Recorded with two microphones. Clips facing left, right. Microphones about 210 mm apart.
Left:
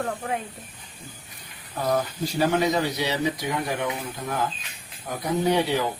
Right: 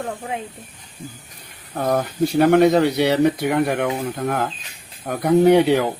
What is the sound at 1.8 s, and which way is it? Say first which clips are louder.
Speech: right 5 dB; 55° right (ahead or behind).